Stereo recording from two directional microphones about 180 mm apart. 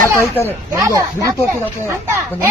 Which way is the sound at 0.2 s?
10° left (ahead or behind).